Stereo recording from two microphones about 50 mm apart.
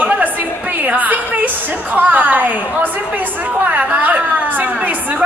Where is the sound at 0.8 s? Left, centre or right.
Right.